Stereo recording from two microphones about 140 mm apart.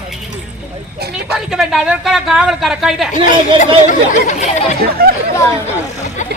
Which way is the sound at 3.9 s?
60° left (ahead or behind).